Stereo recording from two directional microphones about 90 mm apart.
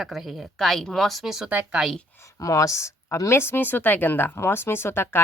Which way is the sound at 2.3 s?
40° left (ahead or behind).